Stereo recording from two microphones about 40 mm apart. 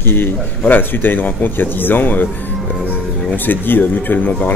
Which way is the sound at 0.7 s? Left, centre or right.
Left.